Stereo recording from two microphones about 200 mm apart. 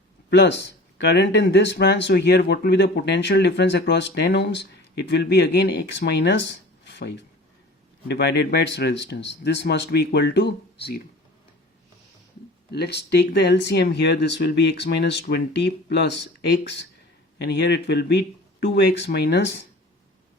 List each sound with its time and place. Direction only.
0.3 s speech: 60° left (ahead or behind)
12.7 s speech: 55° left (ahead or behind)